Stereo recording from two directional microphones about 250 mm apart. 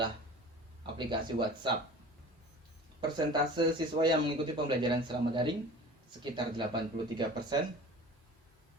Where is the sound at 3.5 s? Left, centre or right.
Centre.